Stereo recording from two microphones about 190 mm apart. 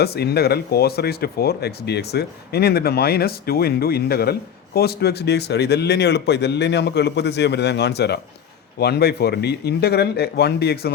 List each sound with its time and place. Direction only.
0.0 s speech: 55° left (ahead or behind)